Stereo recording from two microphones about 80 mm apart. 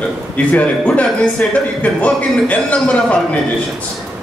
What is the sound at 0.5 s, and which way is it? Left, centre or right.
A man's voice, centre.